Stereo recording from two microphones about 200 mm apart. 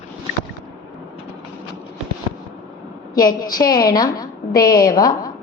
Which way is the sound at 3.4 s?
20° left (ahead or behind).